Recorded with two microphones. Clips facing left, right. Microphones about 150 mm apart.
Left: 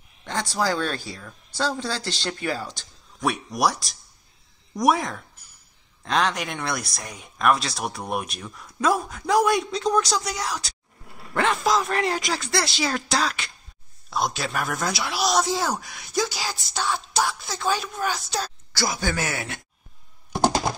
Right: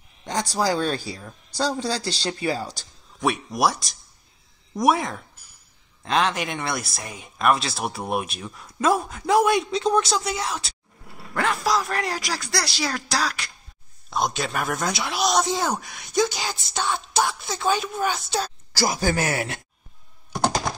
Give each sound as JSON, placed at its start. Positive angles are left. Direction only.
{"t": 0.2, "sound": "speech", "side_deg": -15}
{"t": 3.2, "sound": "speech", "side_deg": 0}
{"t": 18.8, "sound": "speech", "side_deg": -35}